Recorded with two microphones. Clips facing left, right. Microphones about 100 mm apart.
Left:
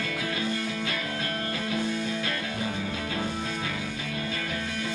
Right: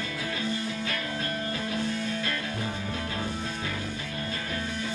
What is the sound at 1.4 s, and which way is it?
Music, 85° left.